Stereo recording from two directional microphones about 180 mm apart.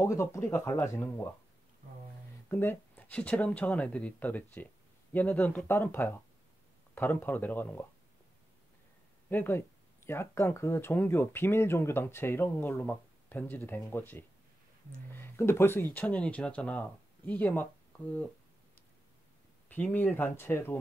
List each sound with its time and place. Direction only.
0.0 s speech: 15° left (ahead or behind)
2.5 s speech: 10° left (ahead or behind)
9.3 s speech: 10° left (ahead or behind)
19.7 s speech: 10° left (ahead or behind)